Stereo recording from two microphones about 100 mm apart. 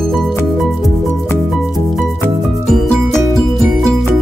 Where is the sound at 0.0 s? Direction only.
5° left (ahead or behind).